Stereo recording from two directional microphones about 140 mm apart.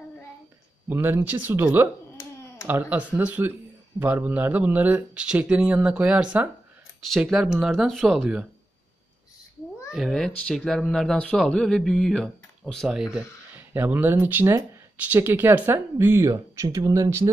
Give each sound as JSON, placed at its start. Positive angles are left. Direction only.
{"t": 0.8, "sound": "speech", "side_deg": -15}
{"t": 9.9, "sound": "speech", "side_deg": 0}
{"t": 13.6, "sound": "speech", "side_deg": -15}